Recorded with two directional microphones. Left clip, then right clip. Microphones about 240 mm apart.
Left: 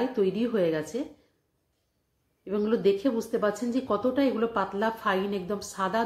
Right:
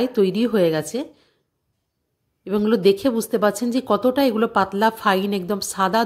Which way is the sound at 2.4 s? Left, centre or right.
Right.